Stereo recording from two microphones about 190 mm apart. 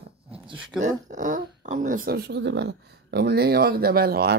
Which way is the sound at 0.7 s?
Centre (ahead or behind).